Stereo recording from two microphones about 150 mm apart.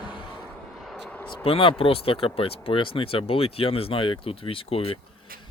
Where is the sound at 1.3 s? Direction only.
35° left (ahead or behind).